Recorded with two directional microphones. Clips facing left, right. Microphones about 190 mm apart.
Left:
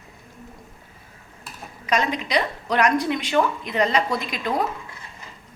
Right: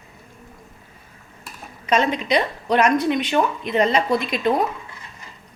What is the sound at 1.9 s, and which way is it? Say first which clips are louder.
A woman's voice: right 3 dB; 25° right (ahead or behind).